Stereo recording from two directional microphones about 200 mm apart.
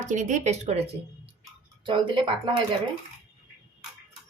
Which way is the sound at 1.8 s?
25° right (ahead or behind).